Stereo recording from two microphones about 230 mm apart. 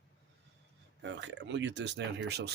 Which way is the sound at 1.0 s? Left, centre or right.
Right.